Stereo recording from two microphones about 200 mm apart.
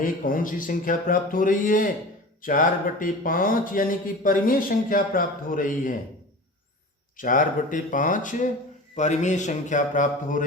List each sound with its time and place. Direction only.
0.0 s speech: 45° left (ahead or behind)
7.2 s speech: 40° left (ahead or behind)